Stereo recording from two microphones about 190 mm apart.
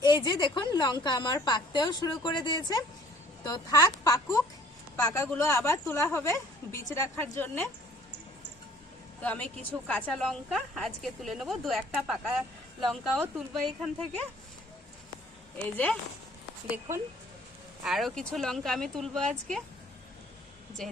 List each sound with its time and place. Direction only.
0.0 s a woman's voice: 25° left (ahead or behind)
9.2 s a woman's voice: 5° left (ahead or behind)
15.6 s a woman's voice: 10° left (ahead or behind)
17.8 s a woman's voice: centre (ahead or behind)